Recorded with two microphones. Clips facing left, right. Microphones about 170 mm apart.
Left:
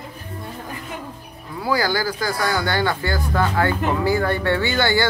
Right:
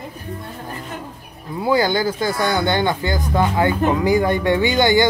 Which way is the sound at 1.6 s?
20° right (ahead or behind).